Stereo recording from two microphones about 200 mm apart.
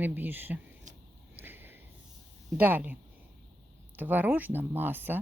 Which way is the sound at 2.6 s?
10° right (ahead or behind).